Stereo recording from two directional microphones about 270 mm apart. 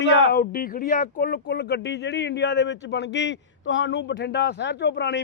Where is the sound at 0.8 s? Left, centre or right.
Left.